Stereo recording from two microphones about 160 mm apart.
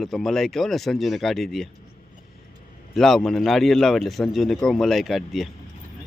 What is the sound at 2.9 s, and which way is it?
Speech, centre (ahead or behind).